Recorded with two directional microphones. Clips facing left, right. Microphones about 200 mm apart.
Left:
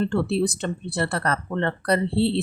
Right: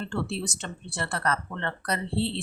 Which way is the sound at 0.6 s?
35° left (ahead or behind).